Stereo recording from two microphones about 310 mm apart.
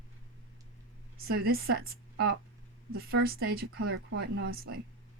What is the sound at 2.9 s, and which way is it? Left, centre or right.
Speech, right.